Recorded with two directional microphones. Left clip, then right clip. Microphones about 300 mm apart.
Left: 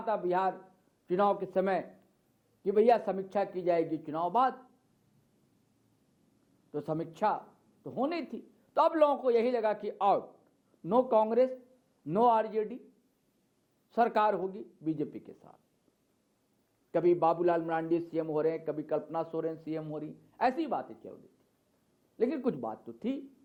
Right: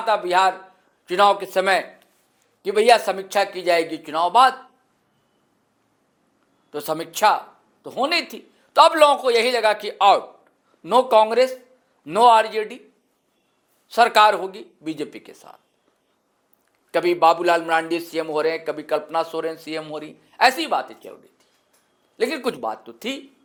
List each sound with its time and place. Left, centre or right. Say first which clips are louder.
0.0 s a man's voice: right 12 dB; centre
6.7 s a man's voice: right 9 dB; centre
13.8 s a man's voice: right 13 dB; centre
16.9 s a man's voice: right 10 dB; centre
22.2 s a man's voice: right 8 dB; centre